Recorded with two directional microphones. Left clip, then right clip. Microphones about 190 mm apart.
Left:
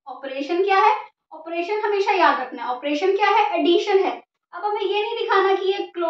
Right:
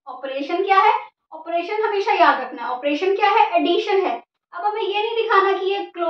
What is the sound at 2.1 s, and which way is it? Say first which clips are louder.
Child singing: right 2 dB; 20° left (ahead or behind).